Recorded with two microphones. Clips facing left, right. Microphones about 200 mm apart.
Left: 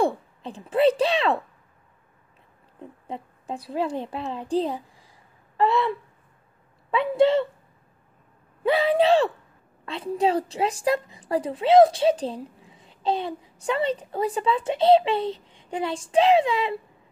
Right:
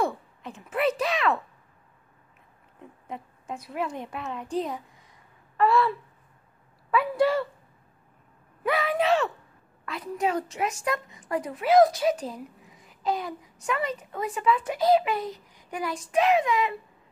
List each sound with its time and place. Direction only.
0.0 s speech: 30° left (ahead or behind)
2.8 s a child's voice: 30° left (ahead or behind)
8.6 s a woman's voice: 30° left (ahead or behind)